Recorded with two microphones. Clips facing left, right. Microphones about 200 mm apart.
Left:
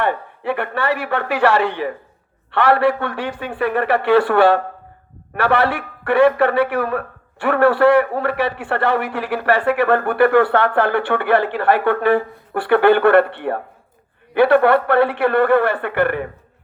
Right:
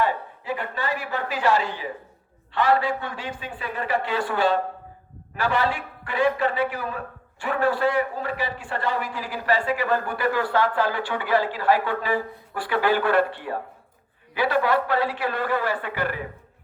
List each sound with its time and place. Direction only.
0.0 s a man's voice: 65° left (ahead or behind)